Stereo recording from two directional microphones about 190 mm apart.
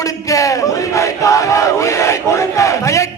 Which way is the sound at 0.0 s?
15° left (ahead or behind).